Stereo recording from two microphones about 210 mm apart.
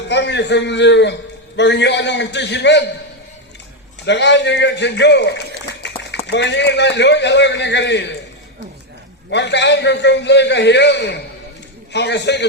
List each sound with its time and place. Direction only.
0.1 s a man's voice: 55° left (ahead or behind)
4.0 s a man's voice: 55° left (ahead or behind)
5.8 s run: 55° left (ahead or behind)
6.2 s a man's voice: 55° left (ahead or behind)
9.3 s a man's voice: 55° left (ahead or behind)